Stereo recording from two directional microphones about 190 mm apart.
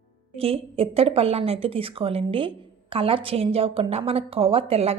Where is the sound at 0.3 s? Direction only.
30° right (ahead or behind).